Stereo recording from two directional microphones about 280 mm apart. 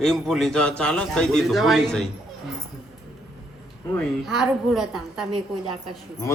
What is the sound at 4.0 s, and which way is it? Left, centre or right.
A child's voice, centre.